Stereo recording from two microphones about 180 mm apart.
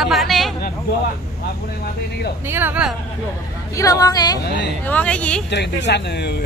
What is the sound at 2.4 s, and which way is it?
Speech, 10° right (ahead or behind).